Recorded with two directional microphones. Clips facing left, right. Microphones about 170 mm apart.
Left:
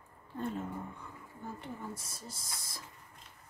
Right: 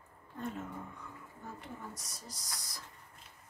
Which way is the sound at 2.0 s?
25° left (ahead or behind).